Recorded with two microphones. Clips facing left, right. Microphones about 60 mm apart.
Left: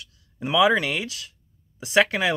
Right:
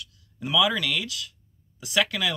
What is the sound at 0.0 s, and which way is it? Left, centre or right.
Speech, left.